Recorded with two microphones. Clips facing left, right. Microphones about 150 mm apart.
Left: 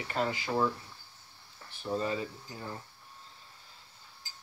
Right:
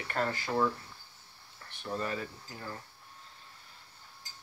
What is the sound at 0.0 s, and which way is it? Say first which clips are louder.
Speech: left 1 dB; 15° left (ahead or behind).